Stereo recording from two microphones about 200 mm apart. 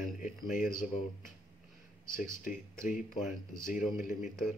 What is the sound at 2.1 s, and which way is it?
Speech, 45° left (ahead or behind).